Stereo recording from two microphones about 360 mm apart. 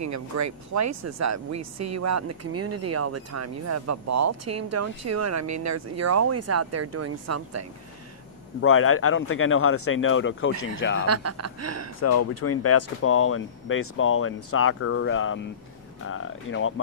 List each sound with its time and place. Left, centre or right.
0.0 s speech: right
8.5 s speech: left
11.0 s speech: right
12.0 s speech: left